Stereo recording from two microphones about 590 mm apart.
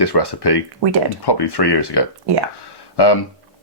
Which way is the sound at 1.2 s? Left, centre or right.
Left.